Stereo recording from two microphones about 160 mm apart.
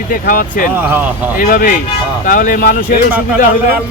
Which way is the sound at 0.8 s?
10° right (ahead or behind).